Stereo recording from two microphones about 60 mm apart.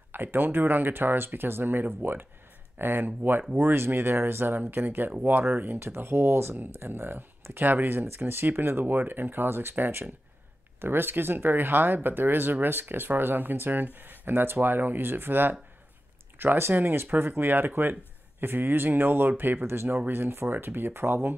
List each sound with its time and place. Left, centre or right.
0.1 s speech: right
4.6 s speech: right